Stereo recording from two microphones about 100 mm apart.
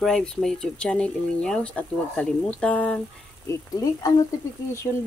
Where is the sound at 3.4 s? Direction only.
35° left (ahead or behind).